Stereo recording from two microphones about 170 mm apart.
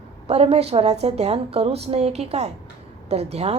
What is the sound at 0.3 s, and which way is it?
A woman's voice, 35° right (ahead or behind).